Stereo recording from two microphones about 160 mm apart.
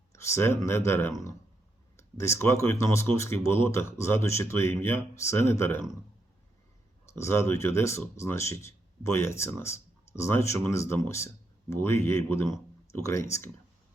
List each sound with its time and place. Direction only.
0.1 s speech: 15° left (ahead or behind)
7.1 s speech: 15° left (ahead or behind)